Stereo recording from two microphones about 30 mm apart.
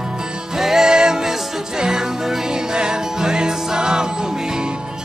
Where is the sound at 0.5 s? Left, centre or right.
Centre.